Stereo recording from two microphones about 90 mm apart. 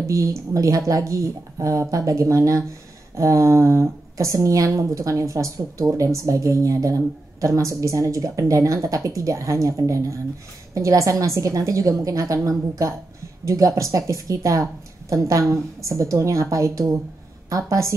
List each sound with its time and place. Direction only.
0.0 s speech: 35° right (ahead or behind)